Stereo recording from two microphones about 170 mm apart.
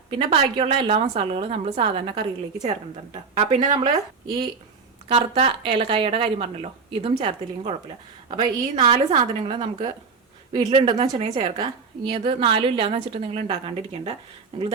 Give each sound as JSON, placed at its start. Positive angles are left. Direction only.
{"t": 0.1, "sound": "a woman's voice", "side_deg": -30}
{"t": 5.0, "sound": "a woman's voice", "side_deg": -35}